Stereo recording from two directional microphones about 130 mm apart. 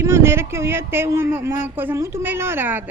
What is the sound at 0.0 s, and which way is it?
Speech, 20° right (ahead or behind).